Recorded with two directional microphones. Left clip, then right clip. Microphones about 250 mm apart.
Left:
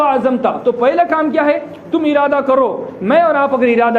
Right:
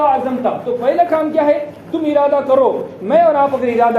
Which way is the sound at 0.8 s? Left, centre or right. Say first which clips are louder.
Even; left.